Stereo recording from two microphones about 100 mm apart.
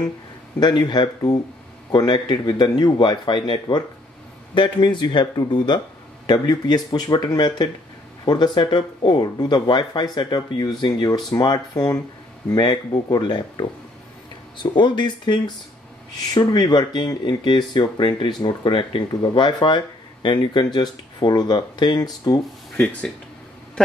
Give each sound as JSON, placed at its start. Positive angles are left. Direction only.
{"t": 0.6, "sound": "speech", "side_deg": 45}
{"t": 22.8, "sound": "speech", "side_deg": 15}